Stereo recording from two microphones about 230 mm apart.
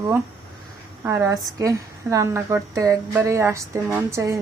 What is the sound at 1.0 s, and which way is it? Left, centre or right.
A woman's voice, centre.